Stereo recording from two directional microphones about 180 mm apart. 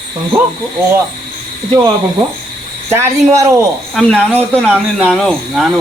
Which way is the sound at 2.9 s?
15° right (ahead or behind).